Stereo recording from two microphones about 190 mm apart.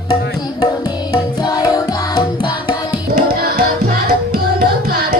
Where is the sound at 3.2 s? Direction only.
55° right (ahead or behind).